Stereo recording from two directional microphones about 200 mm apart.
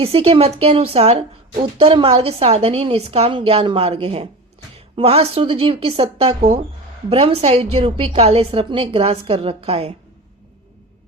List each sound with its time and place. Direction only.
0.0 s a woman's voice: 30° right (ahead or behind)